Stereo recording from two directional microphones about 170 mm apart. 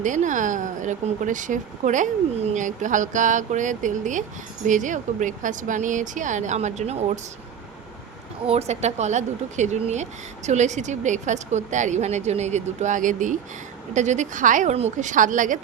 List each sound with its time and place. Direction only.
0.0 s speech: 45° right (ahead or behind)
8.4 s speech: 40° right (ahead or behind)